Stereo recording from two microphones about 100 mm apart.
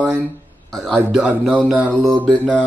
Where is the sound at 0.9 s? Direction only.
5° right (ahead or behind).